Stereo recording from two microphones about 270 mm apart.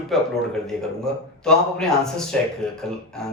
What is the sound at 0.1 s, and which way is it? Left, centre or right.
A man's voice, centre.